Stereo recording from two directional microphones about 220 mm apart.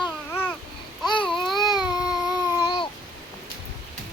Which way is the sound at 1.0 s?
20° left (ahead or behind).